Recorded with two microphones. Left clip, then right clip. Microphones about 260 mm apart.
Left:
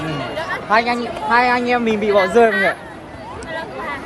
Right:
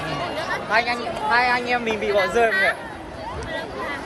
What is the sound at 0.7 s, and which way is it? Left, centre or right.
Speech, centre.